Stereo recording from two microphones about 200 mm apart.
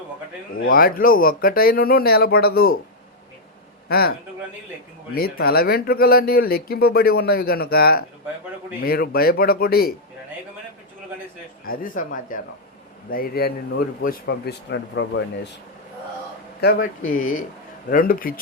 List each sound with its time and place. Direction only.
0.7 s speech: 45° left (ahead or behind)
3.8 s speech: 50° left (ahead or behind)
5.1 s speech: 50° left (ahead or behind)
11.6 s speech: 45° left (ahead or behind); by 15.2 s 65° left (ahead or behind)
16.6 s speech: 50° left (ahead or behind)